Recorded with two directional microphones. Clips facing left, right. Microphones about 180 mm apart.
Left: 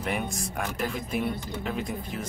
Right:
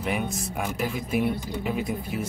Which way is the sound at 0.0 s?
Centre (ahead or behind).